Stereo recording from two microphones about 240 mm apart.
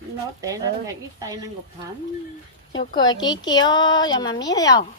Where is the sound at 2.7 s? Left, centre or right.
Centre.